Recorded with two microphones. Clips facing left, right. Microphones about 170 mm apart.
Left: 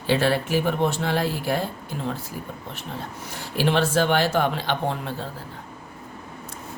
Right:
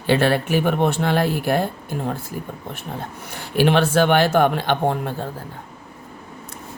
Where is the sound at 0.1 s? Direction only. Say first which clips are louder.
Right 3 dB; 60° right (ahead or behind).